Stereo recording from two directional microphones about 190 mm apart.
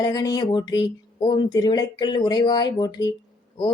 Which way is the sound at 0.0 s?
20° left (ahead or behind).